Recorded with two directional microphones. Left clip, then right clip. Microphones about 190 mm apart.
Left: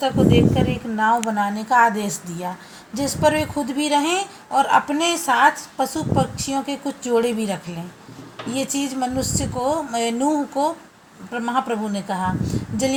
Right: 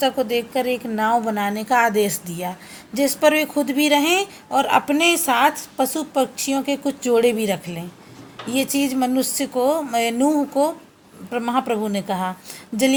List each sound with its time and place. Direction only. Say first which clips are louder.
0.0 s a woman's voice: left 2 dB; 50° right (ahead or behind)